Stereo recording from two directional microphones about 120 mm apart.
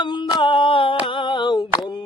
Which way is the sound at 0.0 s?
40° left (ahead or behind).